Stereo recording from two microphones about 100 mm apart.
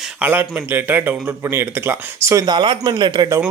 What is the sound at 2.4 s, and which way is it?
Speech, 50° right (ahead or behind).